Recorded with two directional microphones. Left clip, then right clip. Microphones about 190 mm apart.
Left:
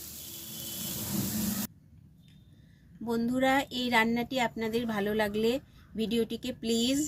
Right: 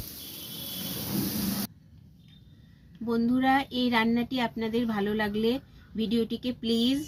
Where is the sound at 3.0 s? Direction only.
65° left (ahead or behind).